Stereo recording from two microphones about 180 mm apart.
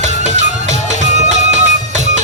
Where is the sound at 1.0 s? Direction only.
40° right (ahead or behind).